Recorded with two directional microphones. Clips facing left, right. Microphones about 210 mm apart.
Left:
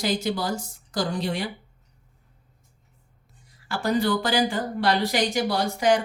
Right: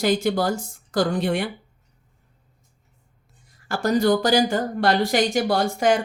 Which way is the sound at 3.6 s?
45° right (ahead or behind).